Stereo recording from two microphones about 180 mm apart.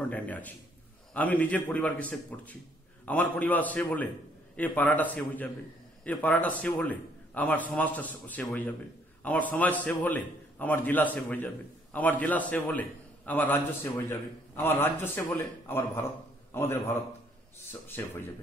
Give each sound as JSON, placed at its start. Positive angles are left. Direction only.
{"t": 0.1, "sound": "a man's voice", "side_deg": 10}